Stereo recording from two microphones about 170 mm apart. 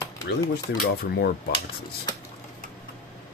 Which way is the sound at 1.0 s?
70° left (ahead or behind).